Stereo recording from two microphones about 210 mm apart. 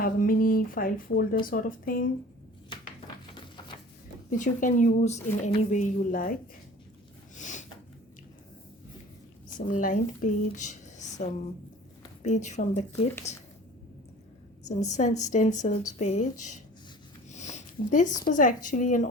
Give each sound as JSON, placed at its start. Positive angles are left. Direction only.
{"t": 0.0, "sound": "a woman's voice", "side_deg": 40}
{"t": 4.3, "sound": "speech", "side_deg": 40}
{"t": 7.3, "sound": "a sound", "side_deg": 35}
{"t": 9.6, "sound": "speech", "side_deg": 40}
{"t": 14.8, "sound": "speech", "side_deg": 35}
{"t": 17.3, "sound": "a sound", "side_deg": 35}
{"t": 18.3, "sound": "speech", "side_deg": 40}